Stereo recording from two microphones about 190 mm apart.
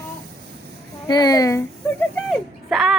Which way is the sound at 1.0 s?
20° left (ahead or behind).